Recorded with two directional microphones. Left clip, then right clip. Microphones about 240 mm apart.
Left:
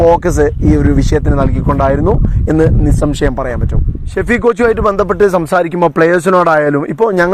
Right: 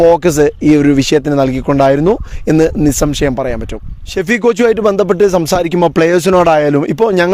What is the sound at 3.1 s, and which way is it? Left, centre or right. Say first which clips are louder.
Speech: right 1 dB; right.